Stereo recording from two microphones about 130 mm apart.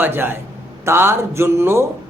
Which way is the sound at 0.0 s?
15° right (ahead or behind).